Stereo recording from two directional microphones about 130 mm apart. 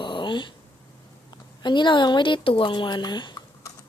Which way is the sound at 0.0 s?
35° left (ahead or behind).